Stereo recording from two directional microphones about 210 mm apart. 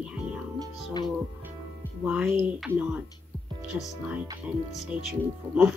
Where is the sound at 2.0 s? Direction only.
5° right (ahead or behind).